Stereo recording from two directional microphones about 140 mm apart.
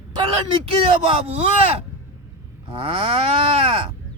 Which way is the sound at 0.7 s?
40° right (ahead or behind).